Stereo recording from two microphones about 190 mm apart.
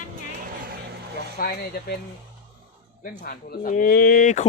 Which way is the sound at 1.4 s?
55° left (ahead or behind).